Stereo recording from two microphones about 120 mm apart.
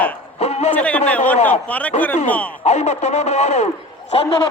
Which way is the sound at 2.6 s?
70° left (ahead or behind).